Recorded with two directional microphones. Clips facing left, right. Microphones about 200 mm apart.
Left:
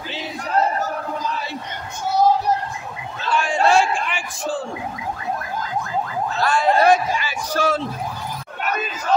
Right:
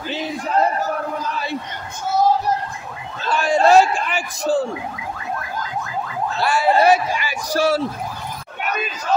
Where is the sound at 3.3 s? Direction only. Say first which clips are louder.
Right 3 dB; 40° right (ahead or behind).